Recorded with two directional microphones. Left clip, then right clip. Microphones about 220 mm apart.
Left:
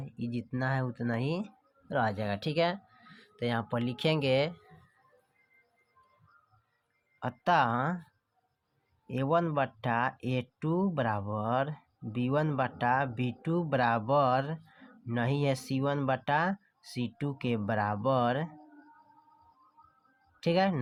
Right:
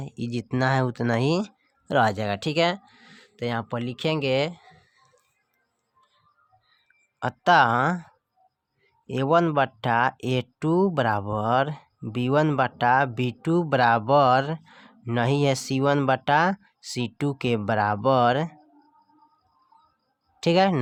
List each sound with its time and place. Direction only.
0.0 s speech: 30° right (ahead or behind)
7.2 s speech: 30° right (ahead or behind)
9.0 s speech: 30° right (ahead or behind)
20.4 s speech: 30° right (ahead or behind)